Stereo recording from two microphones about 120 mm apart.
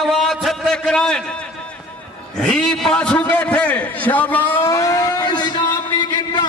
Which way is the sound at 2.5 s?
5° left (ahead or behind).